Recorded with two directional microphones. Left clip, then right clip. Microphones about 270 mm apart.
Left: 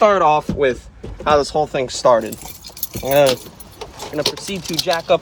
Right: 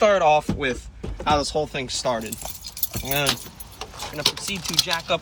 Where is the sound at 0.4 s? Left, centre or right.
Centre.